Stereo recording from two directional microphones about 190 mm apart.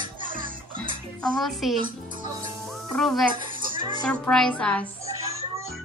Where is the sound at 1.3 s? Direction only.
Centre (ahead or behind).